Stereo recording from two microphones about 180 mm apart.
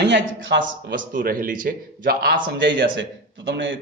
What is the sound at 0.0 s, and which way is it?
Speech, 80° right.